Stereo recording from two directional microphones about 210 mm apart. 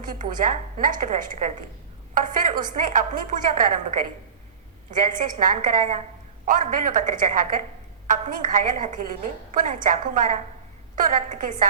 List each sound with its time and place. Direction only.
0.0 s a woman's voice: 40° right (ahead or behind)
4.9 s a woman's voice: 40° right (ahead or behind)